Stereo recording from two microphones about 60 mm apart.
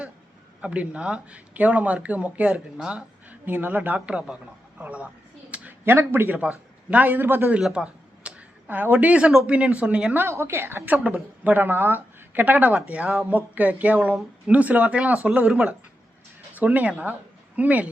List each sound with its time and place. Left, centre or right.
0.6 s speech: centre
3.2 s a man's voice: right
5.5 s a sound: right
5.8 s speech: right
7.7 s a sound: centre
9.5 s speech: right
9.8 s speech: centre
10.2 s a woman's voice: right
10.8 s speech: right; by 15.7 s centre
16.6 s speech: right